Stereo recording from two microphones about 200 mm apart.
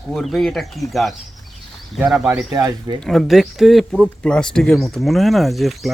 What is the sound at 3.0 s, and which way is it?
Speech, centre (ahead or behind).